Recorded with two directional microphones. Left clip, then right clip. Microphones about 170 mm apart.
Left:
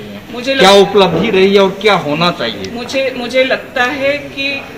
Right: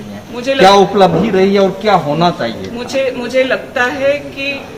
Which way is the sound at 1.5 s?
75° right (ahead or behind).